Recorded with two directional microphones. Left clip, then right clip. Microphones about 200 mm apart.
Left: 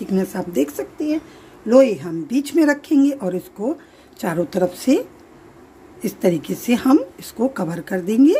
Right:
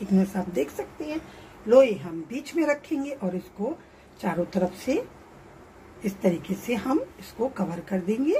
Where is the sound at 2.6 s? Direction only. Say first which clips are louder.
Left 9 dB; 60° left (ahead or behind).